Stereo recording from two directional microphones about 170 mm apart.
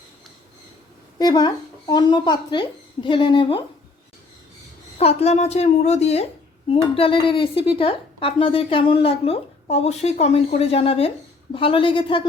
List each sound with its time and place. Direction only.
1.2 s speech: 25° left (ahead or behind)
4.9 s a woman's voice: 35° left (ahead or behind)